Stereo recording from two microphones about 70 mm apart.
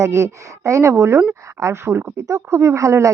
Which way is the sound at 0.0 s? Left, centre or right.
Right.